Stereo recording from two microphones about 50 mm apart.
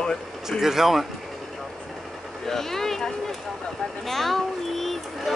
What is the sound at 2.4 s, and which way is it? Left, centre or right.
Speech, centre.